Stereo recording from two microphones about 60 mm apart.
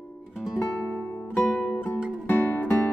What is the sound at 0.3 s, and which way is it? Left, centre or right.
Music, centre.